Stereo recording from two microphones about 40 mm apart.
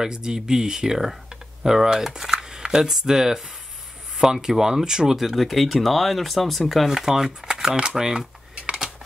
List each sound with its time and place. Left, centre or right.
0.0 s speech: centre
6.9 s speech: centre
7.9 s a sound: centre